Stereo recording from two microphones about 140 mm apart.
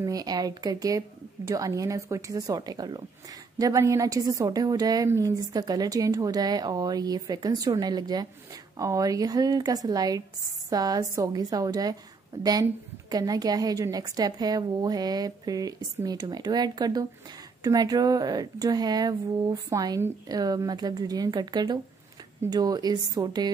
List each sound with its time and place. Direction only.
0.0 s a woman's voice: 25° right (ahead or behind)
13.1 s a woman's voice: 25° right (ahead or behind)